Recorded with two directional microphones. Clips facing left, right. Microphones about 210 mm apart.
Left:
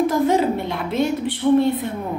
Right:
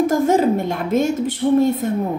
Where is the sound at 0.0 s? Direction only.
45° right (ahead or behind).